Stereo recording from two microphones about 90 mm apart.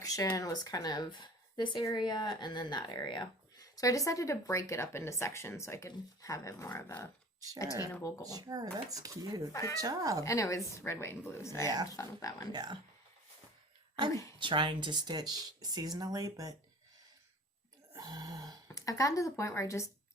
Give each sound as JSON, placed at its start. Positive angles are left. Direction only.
{"t": 0.0, "sound": "a sound", "side_deg": 40}
{"t": 0.3, "sound": "speech", "side_deg": 45}
{"t": 3.6, "sound": "speech", "side_deg": 40}
{"t": 8.2, "sound": "speech", "side_deg": -45}
{"t": 9.5, "sound": "speech", "side_deg": 35}
{"t": 9.7, "sound": "speech", "side_deg": -40}
{"t": 10.2, "sound": "speech", "side_deg": 35}
{"t": 12.5, "sound": "speech", "side_deg": -55}
{"t": 14.1, "sound": "speech", "side_deg": 35}
{"t": 14.3, "sound": "speech", "side_deg": -65}
{"t": 17.9, "sound": "a sound", "side_deg": -45}
{"t": 18.7, "sound": "speech", "side_deg": 40}